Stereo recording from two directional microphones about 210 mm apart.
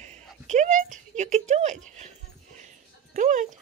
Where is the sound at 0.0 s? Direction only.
35° right (ahead or behind).